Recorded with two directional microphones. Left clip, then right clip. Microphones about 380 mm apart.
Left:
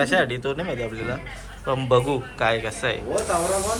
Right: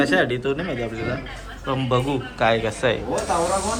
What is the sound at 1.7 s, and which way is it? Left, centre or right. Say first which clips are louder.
A man's voice: left 2 dB; centre.